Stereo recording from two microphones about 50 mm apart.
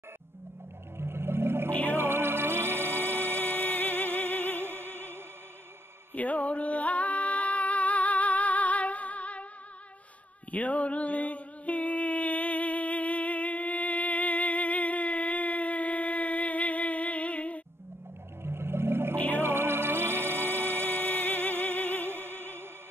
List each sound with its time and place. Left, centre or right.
0.9 s a sound: right
1.9 s music: right
3.8 s music: left
4.6 s music: right
6.1 s music: left
10.5 s a sound: left
18.4 s a sound: right
19.3 s music: right
21.3 s music: left
22.1 s music: right